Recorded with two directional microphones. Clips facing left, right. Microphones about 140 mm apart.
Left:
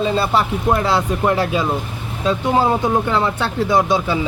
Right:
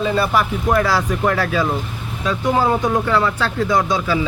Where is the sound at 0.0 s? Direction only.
25° left (ahead or behind).